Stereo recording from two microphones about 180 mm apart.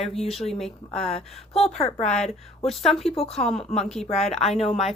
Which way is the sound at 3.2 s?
35° left (ahead or behind).